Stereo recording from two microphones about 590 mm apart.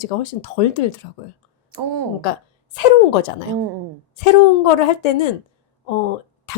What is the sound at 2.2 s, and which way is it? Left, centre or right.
A woman's voice, left.